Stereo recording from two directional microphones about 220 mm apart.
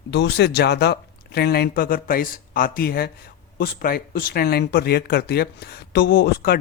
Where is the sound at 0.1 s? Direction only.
50° left (ahead or behind).